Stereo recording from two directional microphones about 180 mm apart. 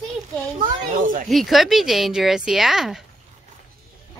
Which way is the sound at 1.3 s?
Centre (ahead or behind).